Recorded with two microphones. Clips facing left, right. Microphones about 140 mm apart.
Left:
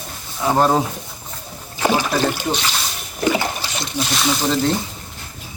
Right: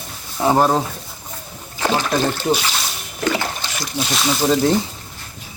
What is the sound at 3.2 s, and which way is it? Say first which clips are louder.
Boat: left 2 dB; 15° left (ahead or behind).